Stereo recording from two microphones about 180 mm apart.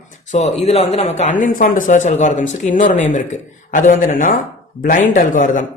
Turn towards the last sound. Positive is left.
turn(degrees=45)  # may be behind; listen again after turning